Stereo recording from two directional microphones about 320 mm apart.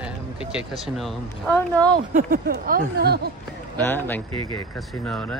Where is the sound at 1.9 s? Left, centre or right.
Right.